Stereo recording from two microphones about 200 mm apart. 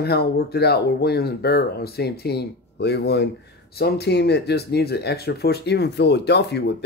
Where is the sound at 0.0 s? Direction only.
50° left (ahead or behind).